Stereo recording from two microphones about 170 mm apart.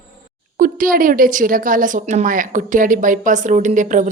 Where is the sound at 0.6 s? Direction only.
55° right (ahead or behind).